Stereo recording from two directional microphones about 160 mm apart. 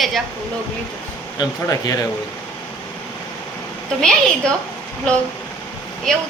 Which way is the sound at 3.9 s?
5° left (ahead or behind).